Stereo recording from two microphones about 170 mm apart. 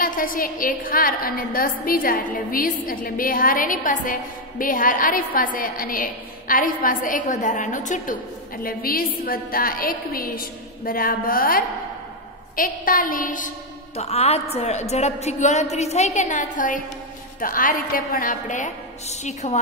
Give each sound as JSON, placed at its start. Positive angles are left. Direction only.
{"t": 0.0, "sound": "a woman's voice", "side_deg": 55}
{"t": 8.6, "sound": "a woman's voice", "side_deg": 60}
{"t": 13.9, "sound": "a woman's voice", "side_deg": 40}